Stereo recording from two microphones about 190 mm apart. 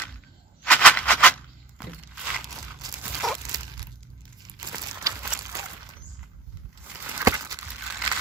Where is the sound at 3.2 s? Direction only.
Centre (ahead or behind).